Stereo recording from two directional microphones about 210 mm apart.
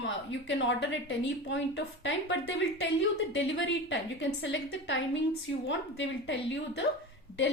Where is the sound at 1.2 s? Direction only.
60° left (ahead or behind).